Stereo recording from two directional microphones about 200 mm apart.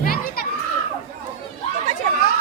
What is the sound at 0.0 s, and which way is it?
Children playing, 45° left (ahead or behind).